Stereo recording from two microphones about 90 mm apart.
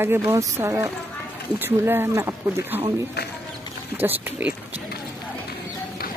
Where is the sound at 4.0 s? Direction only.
25° right (ahead or behind).